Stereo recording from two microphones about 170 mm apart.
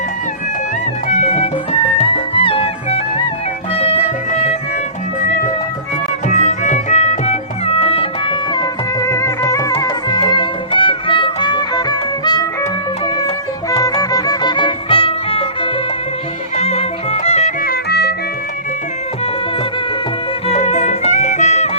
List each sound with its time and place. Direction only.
1.0 s music: 40° left (ahead or behind)
6.2 s music: 45° left (ahead or behind); by 12.5 s 25° left (ahead or behind)
13.7 s music: 20° left (ahead or behind); by 17.5 s 40° left (ahead or behind)
17.6 s music: 65° left (ahead or behind)
20.5 s music: 40° left (ahead or behind)